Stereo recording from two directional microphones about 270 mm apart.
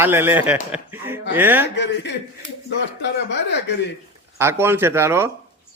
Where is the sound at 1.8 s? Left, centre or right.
Left.